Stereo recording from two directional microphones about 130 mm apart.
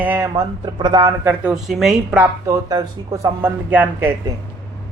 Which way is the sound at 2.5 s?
30° right (ahead or behind).